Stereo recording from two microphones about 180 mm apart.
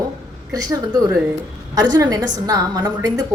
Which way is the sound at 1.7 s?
20° right (ahead or behind).